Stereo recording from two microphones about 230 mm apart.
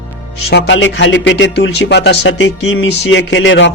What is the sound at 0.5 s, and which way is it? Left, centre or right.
Speech, left.